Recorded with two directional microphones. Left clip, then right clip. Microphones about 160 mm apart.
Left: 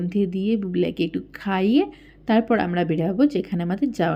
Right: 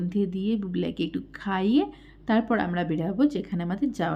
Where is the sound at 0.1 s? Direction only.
15° left (ahead or behind).